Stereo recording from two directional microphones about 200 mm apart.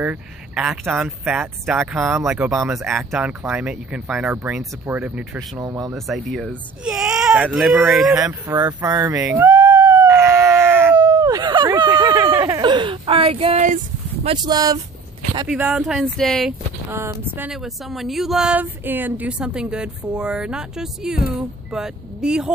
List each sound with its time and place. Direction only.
0.0 s speech: 5° right (ahead or behind)
5.6 s speech: 15° right (ahead or behind)
5.9 s speech: centre (ahead or behind)
8.5 s a sound: 20° right (ahead or behind)
14.2 s speech: 20° right (ahead or behind)
15.4 s speech: 5° right (ahead or behind)
16.9 s speech: 15° right (ahead or behind)
17.5 s speech: centre (ahead or behind)